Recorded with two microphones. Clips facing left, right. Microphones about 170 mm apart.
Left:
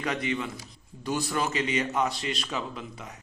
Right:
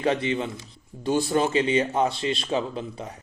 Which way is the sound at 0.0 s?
30° right (ahead or behind).